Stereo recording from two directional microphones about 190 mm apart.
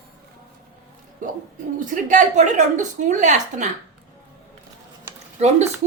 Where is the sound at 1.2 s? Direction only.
45° right (ahead or behind).